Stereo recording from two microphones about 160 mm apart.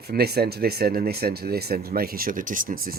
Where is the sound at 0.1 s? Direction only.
75° right (ahead or behind).